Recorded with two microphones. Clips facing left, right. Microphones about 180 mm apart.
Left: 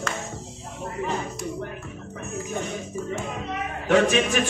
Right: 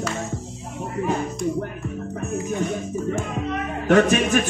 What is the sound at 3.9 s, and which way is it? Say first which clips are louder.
Speech: right 3 dB; 50° right (ahead or behind).